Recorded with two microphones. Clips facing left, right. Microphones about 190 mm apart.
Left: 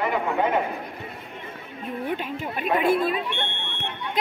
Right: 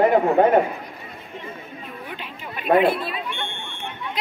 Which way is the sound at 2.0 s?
45° left (ahead or behind).